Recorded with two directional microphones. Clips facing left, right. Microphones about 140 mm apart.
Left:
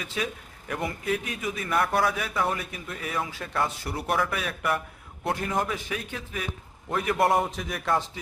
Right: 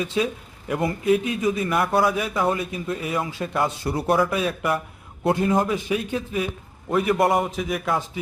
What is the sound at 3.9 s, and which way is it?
A man's voice, 30° right (ahead or behind).